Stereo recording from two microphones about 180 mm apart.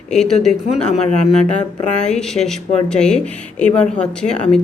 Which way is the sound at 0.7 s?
35° left (ahead or behind).